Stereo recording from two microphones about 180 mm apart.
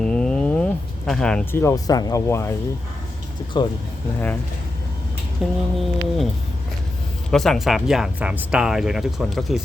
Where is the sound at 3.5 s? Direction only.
25° left (ahead or behind).